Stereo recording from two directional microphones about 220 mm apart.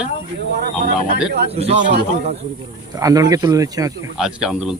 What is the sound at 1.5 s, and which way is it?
Speech, 30° right (ahead or behind).